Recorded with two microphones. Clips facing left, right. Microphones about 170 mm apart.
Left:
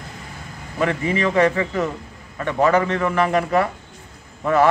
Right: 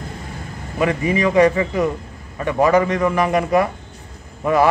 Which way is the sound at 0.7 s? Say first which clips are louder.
Right 2 dB; 15° right (ahead or behind).